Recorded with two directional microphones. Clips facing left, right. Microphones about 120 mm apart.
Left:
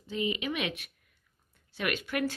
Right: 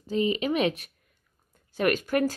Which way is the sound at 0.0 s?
35° right (ahead or behind).